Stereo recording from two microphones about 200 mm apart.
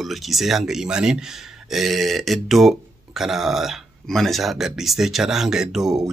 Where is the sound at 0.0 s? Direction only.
Centre (ahead or behind).